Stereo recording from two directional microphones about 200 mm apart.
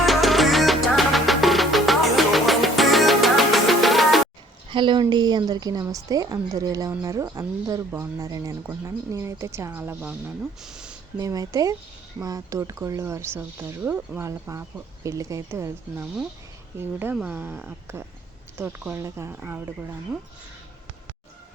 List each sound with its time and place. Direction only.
0.0 s music: centre (ahead or behind)
4.7 s a woman's voice: 25° right (ahead or behind); by 10.9 s 5° right (ahead or behind)
11.2 s a woman's voice: 15° right (ahead or behind)